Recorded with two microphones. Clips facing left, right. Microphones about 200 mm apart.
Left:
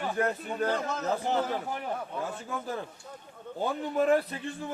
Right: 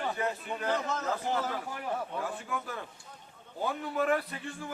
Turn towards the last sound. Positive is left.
turn(degrees=30)  # may be behind; listen again after turning